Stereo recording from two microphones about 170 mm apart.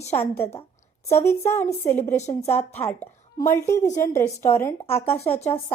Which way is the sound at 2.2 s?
40° left (ahead or behind).